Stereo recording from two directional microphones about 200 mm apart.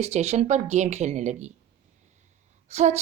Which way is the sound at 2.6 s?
35° right (ahead or behind).